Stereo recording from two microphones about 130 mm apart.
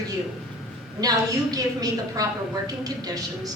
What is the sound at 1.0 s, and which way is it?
A woman's voice, 30° right (ahead or behind).